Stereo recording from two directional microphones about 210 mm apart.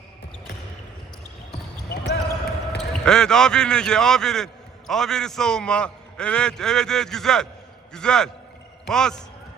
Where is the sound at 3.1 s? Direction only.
5° left (ahead or behind).